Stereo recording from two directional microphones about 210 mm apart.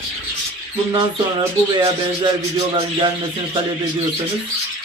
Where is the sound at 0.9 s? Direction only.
25° right (ahead or behind).